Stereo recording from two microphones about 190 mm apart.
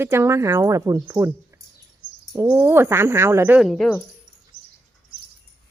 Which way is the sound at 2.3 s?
10° right (ahead or behind).